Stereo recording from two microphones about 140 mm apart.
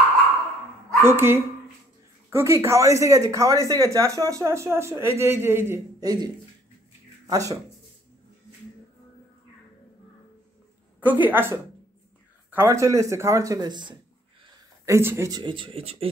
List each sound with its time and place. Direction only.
1.0 s a woman's voice: 15° right (ahead or behind)
11.0 s a woman's voice: 10° right (ahead or behind); by 13.9 s 30° right (ahead or behind)
14.9 s speech: 20° right (ahead or behind); by 16.1 s 45° right (ahead or behind)